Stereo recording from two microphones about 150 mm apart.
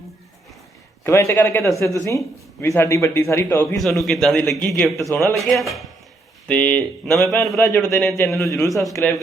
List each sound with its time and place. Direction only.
1.0 s a man's voice: 15° left (ahead or behind)
3.8 s a man's voice: centre (ahead or behind)
8.2 s a man's voice: 20° left (ahead or behind)